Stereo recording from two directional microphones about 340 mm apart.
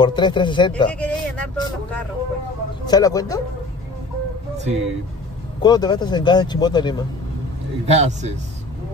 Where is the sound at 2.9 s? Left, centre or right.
Centre.